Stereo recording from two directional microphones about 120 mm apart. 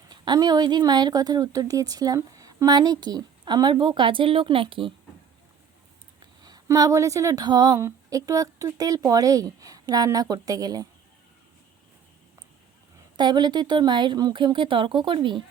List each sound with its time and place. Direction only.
0.1 s speech: 35° right (ahead or behind)
6.4 s a woman's voice: 30° right (ahead or behind)
7.4 s speech: 35° right (ahead or behind)
7.8 s speech: 25° right (ahead or behind)
13.1 s speech: 35° right (ahead or behind)